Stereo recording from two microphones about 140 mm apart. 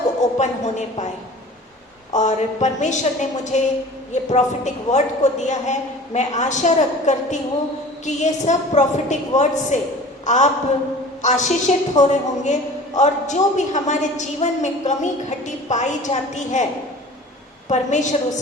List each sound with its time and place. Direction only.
0.3 s a woman's voice: 55° left (ahead or behind)
2.1 s a woman's voice: 60° left (ahead or behind)
17.7 s a woman's voice: 60° left (ahead or behind)